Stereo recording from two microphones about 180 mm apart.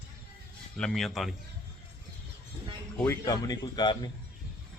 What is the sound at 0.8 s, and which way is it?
Speech, centre (ahead or behind).